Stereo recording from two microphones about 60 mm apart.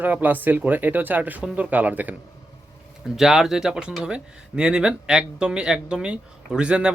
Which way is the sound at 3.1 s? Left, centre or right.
Centre.